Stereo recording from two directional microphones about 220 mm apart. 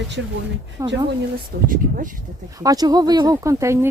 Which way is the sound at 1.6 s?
40° right (ahead or behind).